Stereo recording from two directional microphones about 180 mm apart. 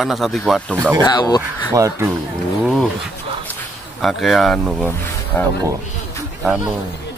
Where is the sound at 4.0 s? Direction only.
Centre (ahead or behind).